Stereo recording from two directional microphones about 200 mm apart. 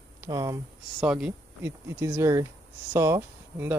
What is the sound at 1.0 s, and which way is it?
Speech, 5° right (ahead or behind).